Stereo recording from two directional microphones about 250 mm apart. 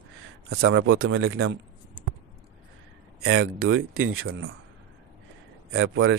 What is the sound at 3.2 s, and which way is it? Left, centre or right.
Speech, right.